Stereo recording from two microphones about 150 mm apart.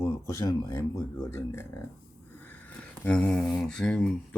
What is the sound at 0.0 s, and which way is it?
Speech, 20° left (ahead or behind).